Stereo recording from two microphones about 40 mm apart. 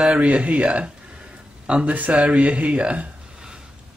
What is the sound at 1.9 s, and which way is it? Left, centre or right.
Speech, right.